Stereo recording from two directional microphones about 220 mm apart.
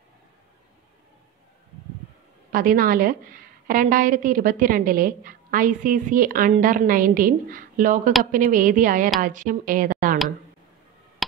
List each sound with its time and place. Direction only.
2.5 s a woman's voice: 40° right (ahead or behind)